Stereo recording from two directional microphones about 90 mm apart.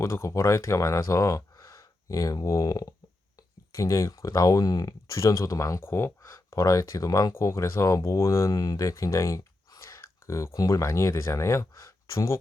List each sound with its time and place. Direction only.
0.0 s speech: 30° left (ahead or behind)